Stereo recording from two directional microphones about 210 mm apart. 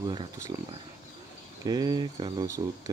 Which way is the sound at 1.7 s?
20° right (ahead or behind).